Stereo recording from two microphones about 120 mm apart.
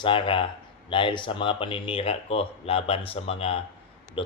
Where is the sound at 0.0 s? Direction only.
45° left (ahead or behind).